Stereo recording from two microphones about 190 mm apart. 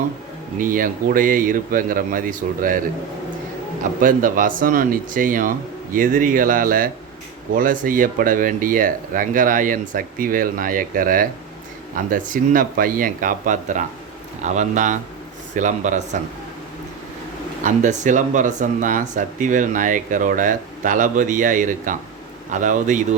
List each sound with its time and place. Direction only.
0.6 s speech: 45° right (ahead or behind)
4.0 s a man's voice: 45° right (ahead or behind)
17.6 s a man's voice: 40° right (ahead or behind)